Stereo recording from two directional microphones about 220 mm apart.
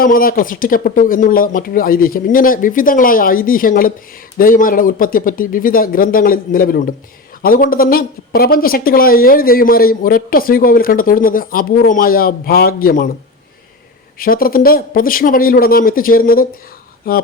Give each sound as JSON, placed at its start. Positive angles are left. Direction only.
{"t": 0.0, "sound": "speech", "side_deg": 40}
{"t": 14.2, "sound": "speech", "side_deg": 40}